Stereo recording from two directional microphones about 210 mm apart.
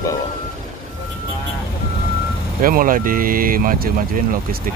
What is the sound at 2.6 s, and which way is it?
Speech, 40° right (ahead or behind).